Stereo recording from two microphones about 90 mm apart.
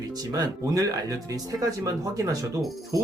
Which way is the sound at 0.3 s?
45° right (ahead or behind).